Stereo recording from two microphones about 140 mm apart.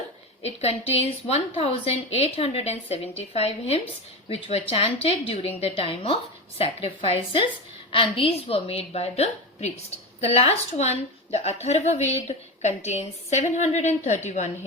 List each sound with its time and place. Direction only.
0.4 s a woman's voice: 50° left (ahead or behind)